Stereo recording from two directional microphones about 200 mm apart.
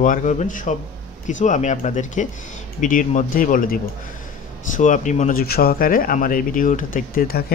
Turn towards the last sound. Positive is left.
turn(degrees=50)  # may be behind; listen again after turning